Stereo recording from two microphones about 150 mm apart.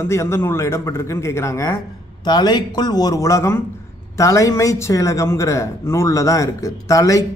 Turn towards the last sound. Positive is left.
turn(degrees=20)  # may be behind; listen again after turning